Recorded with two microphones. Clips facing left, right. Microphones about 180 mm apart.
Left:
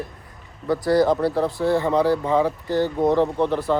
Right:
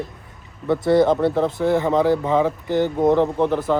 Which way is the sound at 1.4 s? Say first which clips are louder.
Right 2 dB; 20° right (ahead or behind).